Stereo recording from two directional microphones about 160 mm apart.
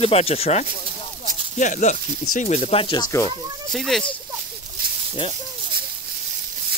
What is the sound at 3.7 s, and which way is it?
Speech, centre (ahead or behind).